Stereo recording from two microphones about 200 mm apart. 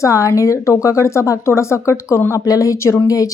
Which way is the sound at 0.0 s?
15° left (ahead or behind).